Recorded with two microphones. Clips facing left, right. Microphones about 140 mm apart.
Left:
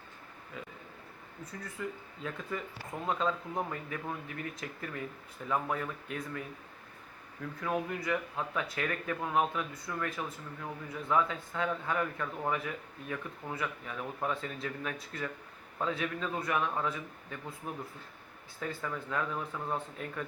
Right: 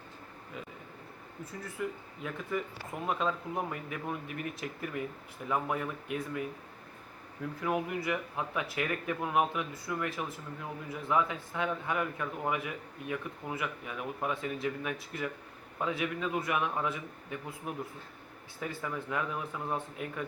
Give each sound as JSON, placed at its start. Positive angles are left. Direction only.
{"t": 1.8, "sound": "a man's voice", "side_deg": -15}
{"t": 7.6, "sound": "a man's voice", "side_deg": -15}